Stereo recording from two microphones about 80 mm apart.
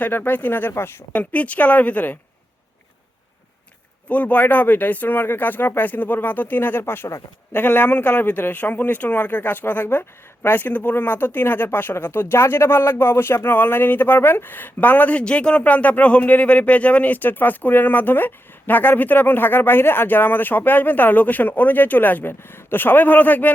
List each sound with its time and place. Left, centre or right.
0.0 s speech: left
1.1 s speech: centre
4.1 s speech: centre